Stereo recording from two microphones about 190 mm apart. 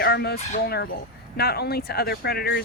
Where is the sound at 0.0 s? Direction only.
55° left (ahead or behind).